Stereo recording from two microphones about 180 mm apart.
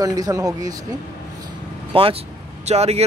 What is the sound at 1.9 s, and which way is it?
Speech, 30° right (ahead or behind).